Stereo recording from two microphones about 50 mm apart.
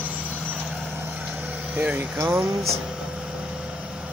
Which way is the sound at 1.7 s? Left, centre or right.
Right.